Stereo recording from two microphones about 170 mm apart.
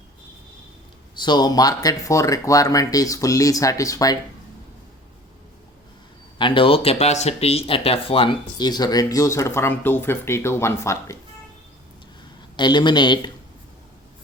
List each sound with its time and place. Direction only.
1.2 s speech: 25° left (ahead or behind)
6.4 s speech: 30° left (ahead or behind)
12.5 s speech: 25° left (ahead or behind)